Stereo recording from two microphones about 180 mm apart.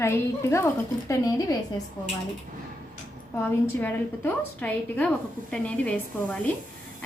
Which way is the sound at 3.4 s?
10° left (ahead or behind).